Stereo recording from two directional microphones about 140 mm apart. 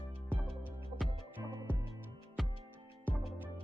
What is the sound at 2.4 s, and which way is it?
Music, centre (ahead or behind).